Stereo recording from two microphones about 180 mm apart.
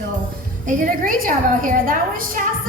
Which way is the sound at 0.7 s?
50° right (ahead or behind).